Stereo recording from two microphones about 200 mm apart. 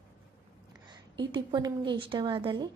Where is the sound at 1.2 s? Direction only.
20° right (ahead or behind).